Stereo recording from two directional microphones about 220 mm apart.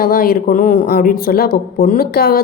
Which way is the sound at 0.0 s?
40° left (ahead or behind).